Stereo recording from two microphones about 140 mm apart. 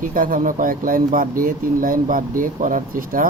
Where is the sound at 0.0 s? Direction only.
75° right (ahead or behind).